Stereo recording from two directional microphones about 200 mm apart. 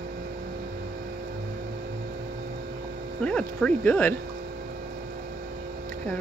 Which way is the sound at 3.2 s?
5° left (ahead or behind).